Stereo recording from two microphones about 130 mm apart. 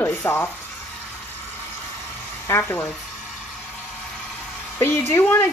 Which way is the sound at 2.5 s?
20° left (ahead or behind).